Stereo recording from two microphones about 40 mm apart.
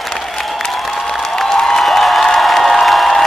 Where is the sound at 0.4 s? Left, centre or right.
Centre.